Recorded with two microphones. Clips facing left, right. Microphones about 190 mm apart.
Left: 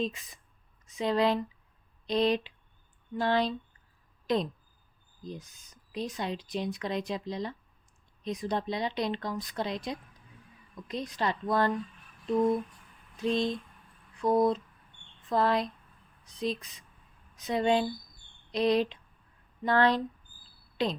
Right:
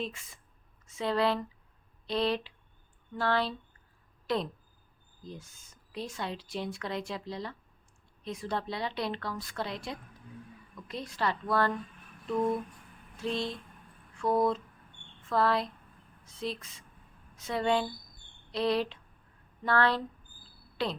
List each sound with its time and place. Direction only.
0.0 s speech: 20° left (ahead or behind)
13.1 s a sound: 20° left (ahead or behind)
14.2 s speech: 15° left (ahead or behind)